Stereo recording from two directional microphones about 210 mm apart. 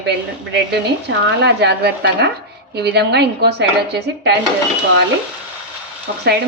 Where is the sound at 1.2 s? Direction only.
55° right (ahead or behind).